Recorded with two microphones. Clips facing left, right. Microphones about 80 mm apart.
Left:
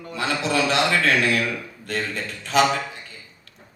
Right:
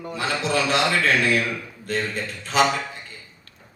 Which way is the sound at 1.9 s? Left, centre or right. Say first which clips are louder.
Right 2 dB; left.